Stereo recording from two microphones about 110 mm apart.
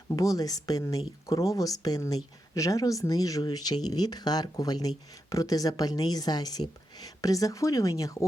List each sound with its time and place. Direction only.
0.1 s speech: 30° left (ahead or behind)